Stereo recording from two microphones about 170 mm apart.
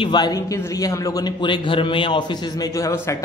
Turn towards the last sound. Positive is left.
turn(degrees=20)  # may be behind; listen again after turning